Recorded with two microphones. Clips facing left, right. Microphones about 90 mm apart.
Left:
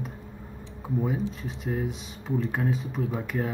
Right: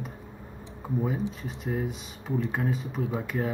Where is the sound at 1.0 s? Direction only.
Centre (ahead or behind).